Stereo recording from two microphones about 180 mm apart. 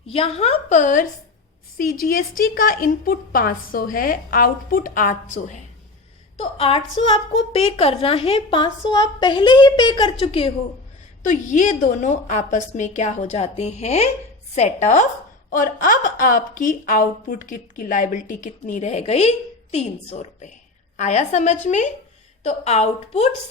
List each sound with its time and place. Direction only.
0.1 s a woman's voice: 35° left (ahead or behind)
6.3 s a woman's voice: 30° left (ahead or behind)
11.2 s a woman's voice: 45° left (ahead or behind)